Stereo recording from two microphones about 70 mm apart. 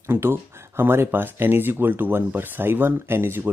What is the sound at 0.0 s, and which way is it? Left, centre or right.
Speech, right.